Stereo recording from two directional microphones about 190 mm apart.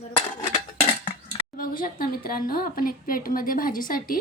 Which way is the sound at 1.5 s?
45° left (ahead or behind).